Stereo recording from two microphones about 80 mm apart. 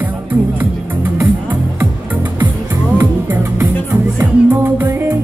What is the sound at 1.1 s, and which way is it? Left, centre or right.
Music, right.